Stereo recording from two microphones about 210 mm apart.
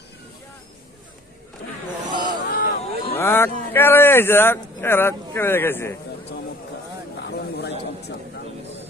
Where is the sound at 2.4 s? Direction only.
45° left (ahead or behind).